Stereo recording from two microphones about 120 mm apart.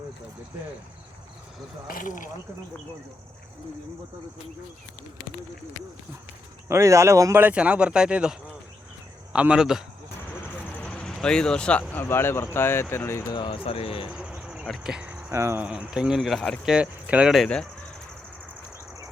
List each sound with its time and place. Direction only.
2.0 s speech: 90° left
6.7 s speech: 25° right (ahead or behind); by 9.8 s 5° right (ahead or behind)
10.8 s speech: 10° left (ahead or behind)
13.3 s speech: 45° left (ahead or behind)
14.1 s cricket: 5° right (ahead or behind)
14.7 s speech: 5° right (ahead or behind); by 15.6 s 20° right (ahead or behind)
15.6 s speech: 10° right (ahead or behind)